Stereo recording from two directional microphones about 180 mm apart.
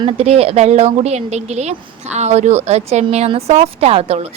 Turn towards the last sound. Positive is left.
turn(degrees=-35)  # may be behind; listen again after turning